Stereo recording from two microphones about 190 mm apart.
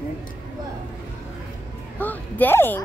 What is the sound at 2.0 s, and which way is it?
Speech, 10° left (ahead or behind).